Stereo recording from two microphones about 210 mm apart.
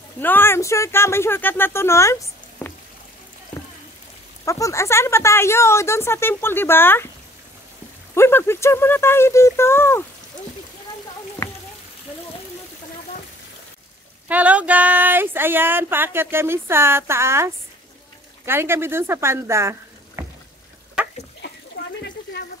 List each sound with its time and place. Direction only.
0.2 s speech: 10° left (ahead or behind)
4.5 s speech: 15° left (ahead or behind)
8.1 s speech: 10° left (ahead or behind)
14.2 s speech: 5° right (ahead or behind)
21.4 s water: 55° left (ahead or behind)